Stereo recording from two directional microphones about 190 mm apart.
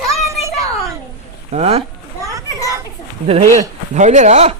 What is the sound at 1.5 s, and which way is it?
Speech, 35° right (ahead or behind).